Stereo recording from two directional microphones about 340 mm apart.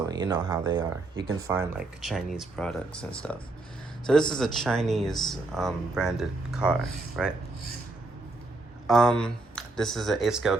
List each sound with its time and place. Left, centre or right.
0.0 s speech: centre
1.1 s speech: right
1.4 s speech: centre
8.9 s speech: centre